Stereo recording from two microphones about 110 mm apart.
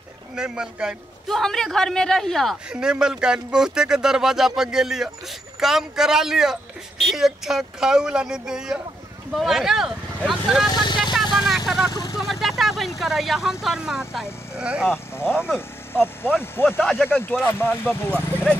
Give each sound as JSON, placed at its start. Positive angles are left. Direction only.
{"t": 0.4, "sound": "speech", "side_deg": -5}
{"t": 10.7, "sound": "speech", "side_deg": 45}
{"t": 11.4, "sound": "vehicle", "side_deg": -5}
{"t": 11.9, "sound": "speech", "side_deg": 35}
{"t": 12.2, "sound": "speech", "side_deg": 0}
{"t": 15.9, "sound": "speech", "side_deg": 20}